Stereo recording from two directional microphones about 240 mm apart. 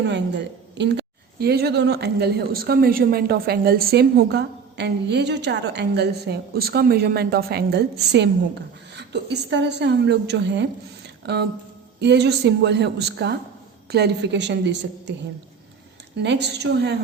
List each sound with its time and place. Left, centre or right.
0.0 s a woman's voice: right
16.2 s a woman's voice: right